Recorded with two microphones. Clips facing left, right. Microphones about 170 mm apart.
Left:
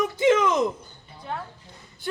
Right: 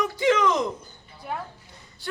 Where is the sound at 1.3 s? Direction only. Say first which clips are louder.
Right 1 dB; 10° right (ahead or behind).